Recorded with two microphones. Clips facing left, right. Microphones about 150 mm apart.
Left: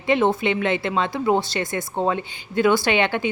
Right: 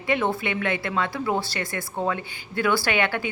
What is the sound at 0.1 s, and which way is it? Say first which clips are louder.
A woman's voice: left 5 dB; 25° left (ahead or behind).